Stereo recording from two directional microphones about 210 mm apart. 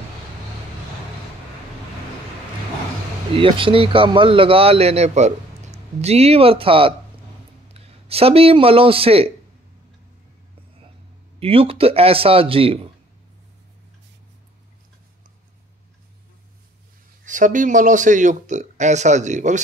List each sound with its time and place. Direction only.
3.3 s a man's voice: 25° right (ahead or behind)
11.3 s a man's voice: 25° right (ahead or behind)
17.2 s a man's voice: 40° right (ahead or behind)